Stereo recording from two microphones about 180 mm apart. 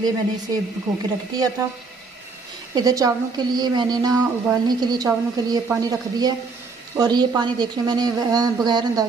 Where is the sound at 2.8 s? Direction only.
20° right (ahead or behind).